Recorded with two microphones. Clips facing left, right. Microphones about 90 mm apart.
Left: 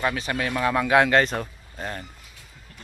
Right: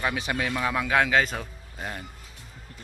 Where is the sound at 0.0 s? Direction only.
10° right (ahead or behind).